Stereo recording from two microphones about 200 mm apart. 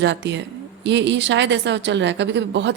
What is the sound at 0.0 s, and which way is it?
Speech, 65° right (ahead or behind).